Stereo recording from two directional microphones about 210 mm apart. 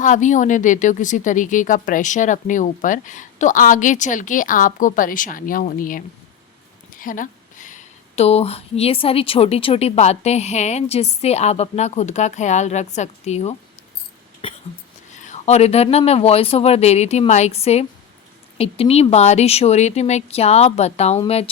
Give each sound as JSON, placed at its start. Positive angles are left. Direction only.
{"t": 0.0, "sound": "speech", "side_deg": 35}
{"t": 14.4, "sound": "a sound", "side_deg": 25}
{"t": 15.2, "sound": "speech", "side_deg": 35}